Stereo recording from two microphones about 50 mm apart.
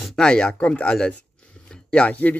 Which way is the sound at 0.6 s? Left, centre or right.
Left.